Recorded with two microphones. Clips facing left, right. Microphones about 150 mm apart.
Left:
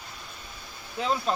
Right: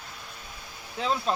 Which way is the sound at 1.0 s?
5° left (ahead or behind).